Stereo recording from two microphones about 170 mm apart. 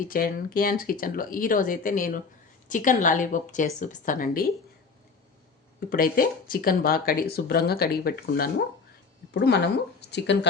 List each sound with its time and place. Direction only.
0.1 s speech: 55° left (ahead or behind)
5.9 s speech: 55° left (ahead or behind)
9.3 s speech: 80° left